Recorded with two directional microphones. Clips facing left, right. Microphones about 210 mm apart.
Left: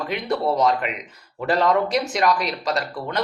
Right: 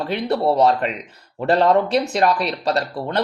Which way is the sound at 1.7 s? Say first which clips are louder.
Right 3 dB; 30° right (ahead or behind).